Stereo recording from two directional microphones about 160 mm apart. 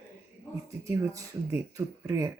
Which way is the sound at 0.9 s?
15° right (ahead or behind).